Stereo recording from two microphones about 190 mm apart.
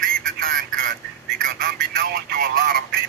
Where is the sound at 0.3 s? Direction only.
50° right (ahead or behind).